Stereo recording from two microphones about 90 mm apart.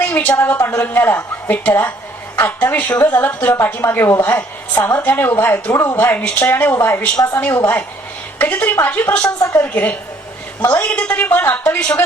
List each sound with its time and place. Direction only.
0.0 s a woman's voice: 20° left (ahead or behind)
3.2 s speech: 20° left (ahead or behind)
9.4 s a woman's voice: 35° left (ahead or behind)
9.7 s a woman's voice: 20° left (ahead or behind)